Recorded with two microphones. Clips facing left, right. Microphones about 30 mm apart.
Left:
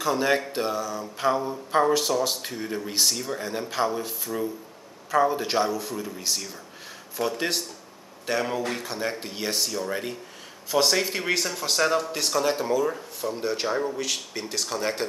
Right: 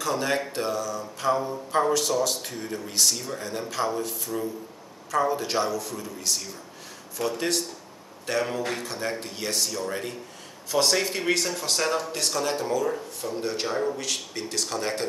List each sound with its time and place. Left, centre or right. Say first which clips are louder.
0.0 s mantra: left 3 dB; centre
10.7 s speech: left 1 dB; centre